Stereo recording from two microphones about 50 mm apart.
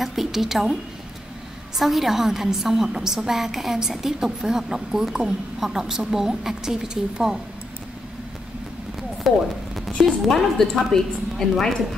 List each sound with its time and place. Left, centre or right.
0.0 s speech: centre
1.8 s a woman's voice: centre
9.3 s speech: centre